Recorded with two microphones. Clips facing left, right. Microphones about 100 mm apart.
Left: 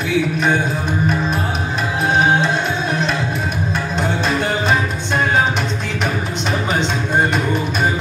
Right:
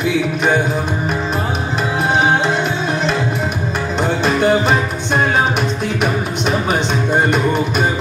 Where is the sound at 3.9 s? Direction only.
20° right (ahead or behind).